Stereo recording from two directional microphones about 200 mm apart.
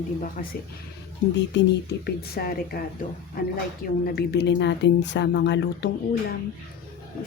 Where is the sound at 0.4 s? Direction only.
45° left (ahead or behind).